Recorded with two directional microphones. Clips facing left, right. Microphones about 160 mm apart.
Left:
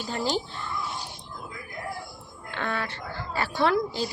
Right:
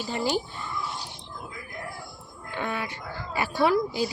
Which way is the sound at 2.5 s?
10° right (ahead or behind).